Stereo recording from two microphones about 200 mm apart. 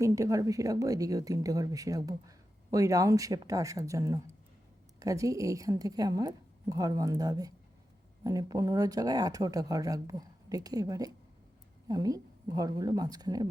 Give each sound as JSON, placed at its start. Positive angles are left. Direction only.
{"t": 0.0, "sound": "a woman's voice", "side_deg": -15}